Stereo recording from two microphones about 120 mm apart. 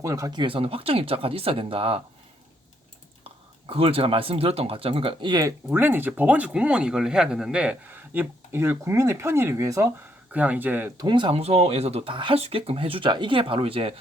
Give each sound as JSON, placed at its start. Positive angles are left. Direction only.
{"t": 0.0, "sound": "speech", "side_deg": -25}
{"t": 0.4, "sound": "speech", "side_deg": -50}
{"t": 3.7, "sound": "speech", "side_deg": -50}
{"t": 5.4, "sound": "speech", "side_deg": -20}
{"t": 10.3, "sound": "speech", "side_deg": -10}
{"t": 10.9, "sound": "speech", "side_deg": -35}
{"t": 11.3, "sound": "speech", "side_deg": -60}